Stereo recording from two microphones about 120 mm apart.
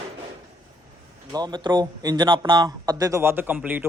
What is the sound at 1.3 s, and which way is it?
A man's voice, 35° right (ahead or behind).